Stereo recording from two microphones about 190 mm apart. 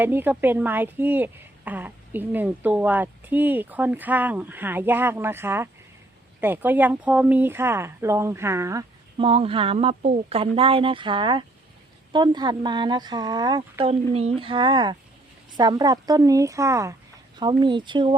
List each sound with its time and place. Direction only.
0.0 s a woman's voice: 10° right (ahead or behind)
9.1 s a woman's voice: 30° right (ahead or behind)